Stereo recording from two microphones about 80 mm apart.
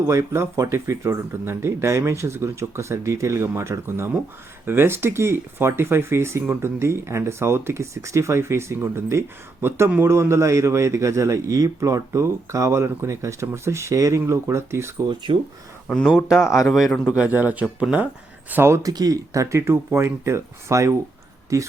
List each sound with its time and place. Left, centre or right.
0.1 s speech: right
15.0 s speech: right
16.0 s speech: centre
17.2 s a man's voice: right
18.5 s speech: right
18.8 s speech: right